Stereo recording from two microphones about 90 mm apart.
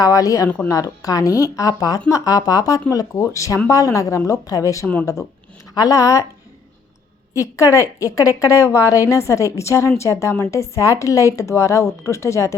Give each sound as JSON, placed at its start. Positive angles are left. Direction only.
{"t": 0.0, "sound": "a woman's voice", "side_deg": 40}
{"t": 7.3, "sound": "a woman's voice", "side_deg": 35}